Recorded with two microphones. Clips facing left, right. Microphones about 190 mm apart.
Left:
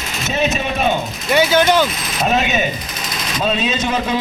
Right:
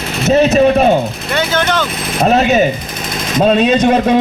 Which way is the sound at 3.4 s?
55° right (ahead or behind).